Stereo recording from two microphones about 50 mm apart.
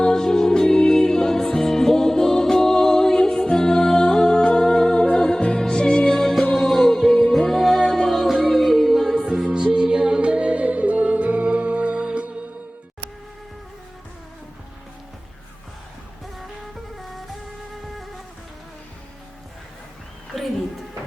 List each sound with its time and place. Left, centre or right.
0.0 s music: centre
9.8 s music: centre
16.7 s music: centre